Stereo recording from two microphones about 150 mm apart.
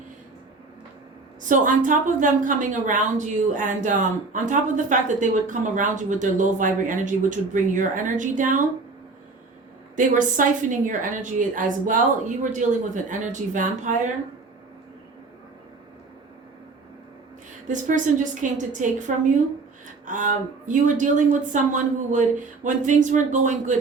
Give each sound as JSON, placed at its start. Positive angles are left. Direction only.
{"t": 1.5, "sound": "a woman's voice", "side_deg": -60}
{"t": 9.9, "sound": "a woman's voice", "side_deg": -60}
{"t": 17.7, "sound": "a woman's voice", "side_deg": -55}